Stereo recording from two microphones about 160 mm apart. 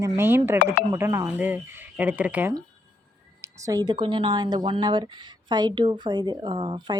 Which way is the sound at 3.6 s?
20° right (ahead or behind).